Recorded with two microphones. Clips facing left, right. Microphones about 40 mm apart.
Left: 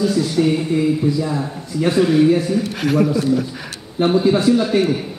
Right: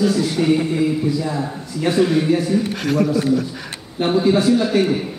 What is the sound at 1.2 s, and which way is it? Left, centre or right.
A man's voice, centre.